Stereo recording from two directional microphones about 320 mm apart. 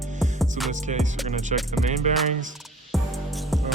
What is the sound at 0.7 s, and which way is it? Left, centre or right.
Music, right.